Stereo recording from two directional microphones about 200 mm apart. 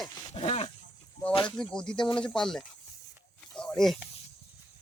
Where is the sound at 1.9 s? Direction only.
25° left (ahead or behind).